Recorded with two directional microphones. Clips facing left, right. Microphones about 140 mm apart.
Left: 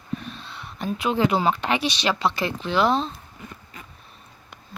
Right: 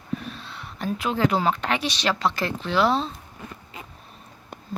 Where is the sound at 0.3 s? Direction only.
Centre (ahead or behind).